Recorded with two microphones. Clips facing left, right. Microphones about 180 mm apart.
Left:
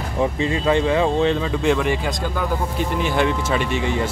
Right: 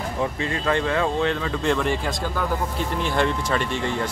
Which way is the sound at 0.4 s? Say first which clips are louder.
Left 5 dB; 20° left (ahead or behind).